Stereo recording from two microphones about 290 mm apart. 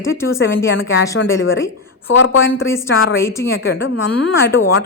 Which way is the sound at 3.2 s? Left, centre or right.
Centre.